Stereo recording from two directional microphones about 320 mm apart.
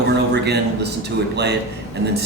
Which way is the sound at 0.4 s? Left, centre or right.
Right.